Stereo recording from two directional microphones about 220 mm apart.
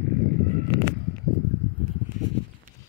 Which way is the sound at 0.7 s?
20° left (ahead or behind).